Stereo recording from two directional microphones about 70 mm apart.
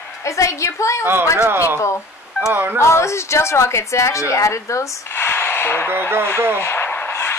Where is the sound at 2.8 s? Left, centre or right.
Left.